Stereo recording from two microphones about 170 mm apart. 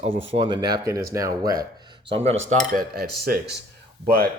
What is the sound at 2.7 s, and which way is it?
Speech, 60° right (ahead or behind).